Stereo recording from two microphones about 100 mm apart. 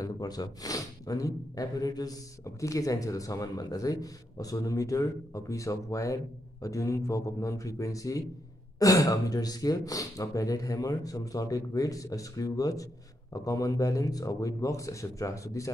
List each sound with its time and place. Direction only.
0.0 s speech: 40° left (ahead or behind)